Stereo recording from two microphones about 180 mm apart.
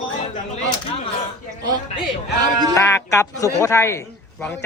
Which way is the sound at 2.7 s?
15° left (ahead or behind).